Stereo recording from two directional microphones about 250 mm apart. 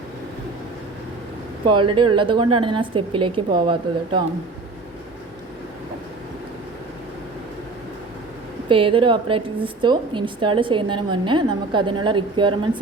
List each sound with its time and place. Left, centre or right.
1.6 s a woman's voice: centre
8.7 s a woman's voice: right